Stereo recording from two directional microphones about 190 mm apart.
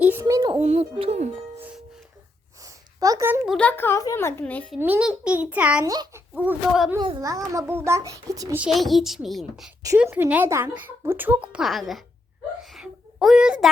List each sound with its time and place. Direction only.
0.0 s a sound: 10° right (ahead or behind)
0.6 s a woman's voice: 35° right (ahead or behind)
3.0 s a woman's voice: 15° right (ahead or behind)
3.4 s a child's voice: 5° left (ahead or behind)
4.8 s a woman's voice: 10° right (ahead or behind)
5.9 s a child's voice: 20° right (ahead or behind)
6.3 s a woman's voice: 10° right (ahead or behind)
7.0 s a woman's voice: 20° right (ahead or behind)
8.6 s a child's voice: centre (ahead or behind)
12.7 s a sound: centre (ahead or behind)